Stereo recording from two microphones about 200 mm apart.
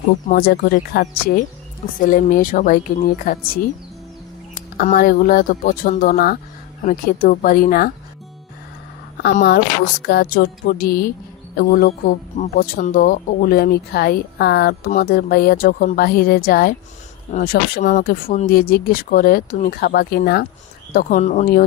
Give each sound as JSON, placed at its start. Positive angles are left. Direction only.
{"t": 0.3, "sound": "speech", "side_deg": 50}
{"t": 4.8, "sound": "speech", "side_deg": 45}
{"t": 9.3, "sound": "speech", "side_deg": 55}